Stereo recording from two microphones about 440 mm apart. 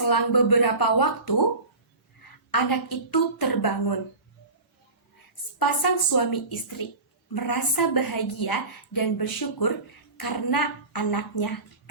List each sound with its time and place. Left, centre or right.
0.0 s a woman's voice: left
2.5 s a woman's voice: left
5.5 s a woman's voice: left